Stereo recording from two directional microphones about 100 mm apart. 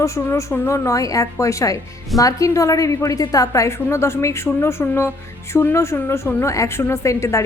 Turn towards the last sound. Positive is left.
turn(degrees=30)  # may be behind; listen again after turning